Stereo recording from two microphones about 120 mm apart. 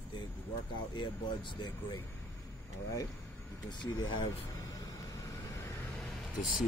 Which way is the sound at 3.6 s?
40° left (ahead or behind).